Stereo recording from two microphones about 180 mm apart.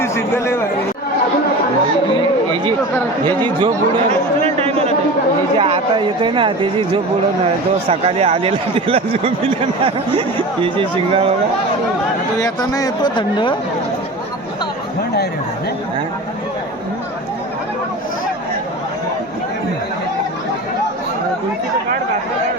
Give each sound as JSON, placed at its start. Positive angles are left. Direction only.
{"t": 0.0, "sound": "a man's voice", "side_deg": 15}
{"t": 3.2, "sound": "a man's voice", "side_deg": -25}
{"t": 12.4, "sound": "speech", "side_deg": 20}